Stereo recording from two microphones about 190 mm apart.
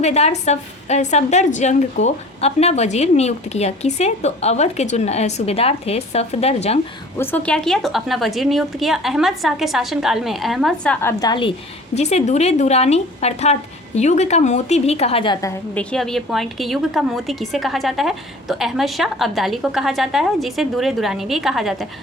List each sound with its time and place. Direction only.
0.0 s a woman's voice: 35° left (ahead or behind)
7.2 s a woman's voice: 10° left (ahead or behind)
11.0 s a woman's voice: 20° left (ahead or behind)
11.9 s a woman's voice: 35° left (ahead or behind); by 21.8 s centre (ahead or behind)